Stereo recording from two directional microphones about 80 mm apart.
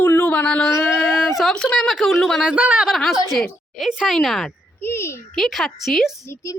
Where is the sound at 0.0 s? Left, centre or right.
Centre.